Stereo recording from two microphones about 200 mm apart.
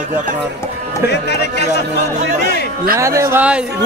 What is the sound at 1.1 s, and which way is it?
Speech, 55° left (ahead or behind).